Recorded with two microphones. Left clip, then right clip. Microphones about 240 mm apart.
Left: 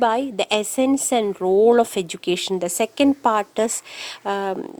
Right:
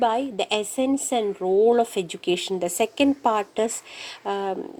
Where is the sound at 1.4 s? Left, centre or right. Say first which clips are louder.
Left 3 dB; left.